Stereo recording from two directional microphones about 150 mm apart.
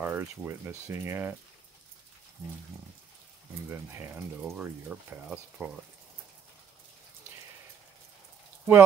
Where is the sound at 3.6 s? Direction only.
15° right (ahead or behind).